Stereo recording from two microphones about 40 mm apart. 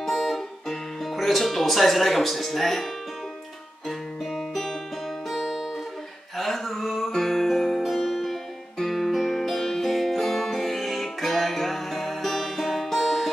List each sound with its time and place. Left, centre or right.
0.0 s music: centre
4.3 s music: centre